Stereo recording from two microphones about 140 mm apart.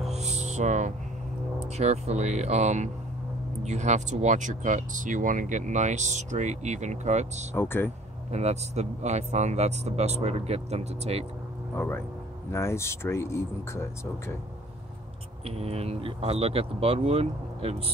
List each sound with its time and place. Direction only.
0.1 s music: 55° right (ahead or behind)
1.8 s speech: 50° right (ahead or behind)
7.5 s speech: 15° left (ahead or behind)
8.3 s speech: 50° right (ahead or behind)
11.7 s speech: 15° left (ahead or behind)
15.4 s speech: 45° right (ahead or behind)